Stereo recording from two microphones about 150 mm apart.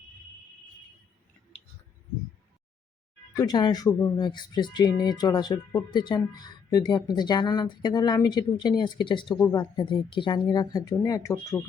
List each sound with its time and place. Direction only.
3.3 s speech: 25° left (ahead or behind)